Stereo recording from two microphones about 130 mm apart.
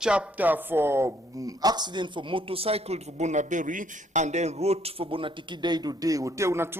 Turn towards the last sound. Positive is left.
turn(degrees=-20)  # may be behind; listen again after turning